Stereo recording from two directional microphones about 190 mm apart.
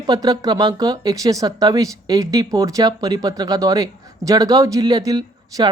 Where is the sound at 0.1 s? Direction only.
20° right (ahead or behind).